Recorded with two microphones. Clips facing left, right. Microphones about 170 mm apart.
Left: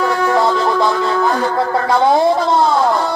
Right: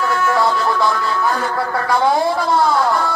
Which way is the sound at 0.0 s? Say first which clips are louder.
Left 3 dB; 20° left (ahead or behind).